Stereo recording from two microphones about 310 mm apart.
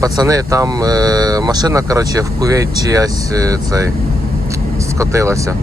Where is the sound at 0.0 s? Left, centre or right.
Centre.